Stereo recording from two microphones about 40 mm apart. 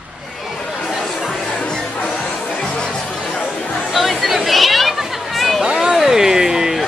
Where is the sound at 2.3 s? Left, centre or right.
Left.